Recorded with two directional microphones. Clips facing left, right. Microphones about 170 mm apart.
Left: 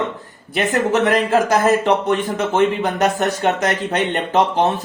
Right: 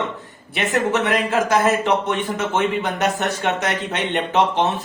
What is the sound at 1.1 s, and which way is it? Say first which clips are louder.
A man's voice: left 3 dB; 40° left (ahead or behind).